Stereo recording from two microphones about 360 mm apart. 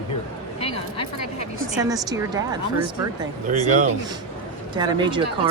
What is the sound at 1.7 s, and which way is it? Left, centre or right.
Speech, centre.